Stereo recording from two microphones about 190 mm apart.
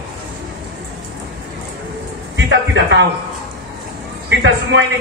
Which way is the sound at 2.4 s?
70° right (ahead or behind).